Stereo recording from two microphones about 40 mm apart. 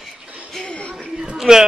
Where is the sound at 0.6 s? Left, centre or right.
Left.